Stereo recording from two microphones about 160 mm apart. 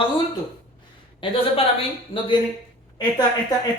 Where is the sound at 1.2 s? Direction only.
35° left (ahead or behind).